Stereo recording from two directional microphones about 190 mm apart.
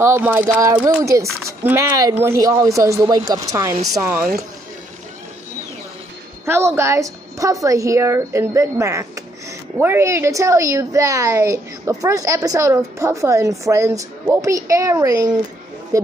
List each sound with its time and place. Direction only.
0.0 s speech: 10° right (ahead or behind)
6.4 s speech: 15° right (ahead or behind)